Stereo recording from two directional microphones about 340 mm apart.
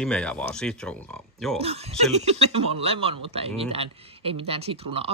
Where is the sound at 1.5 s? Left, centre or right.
Centre.